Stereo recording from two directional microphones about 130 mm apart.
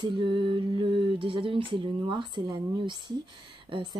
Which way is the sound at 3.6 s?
40° right (ahead or behind).